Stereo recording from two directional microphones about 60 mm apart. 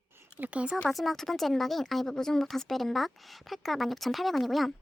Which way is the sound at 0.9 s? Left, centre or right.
Centre.